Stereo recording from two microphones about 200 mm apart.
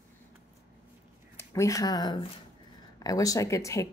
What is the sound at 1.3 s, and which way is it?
Speech, 15° left (ahead or behind).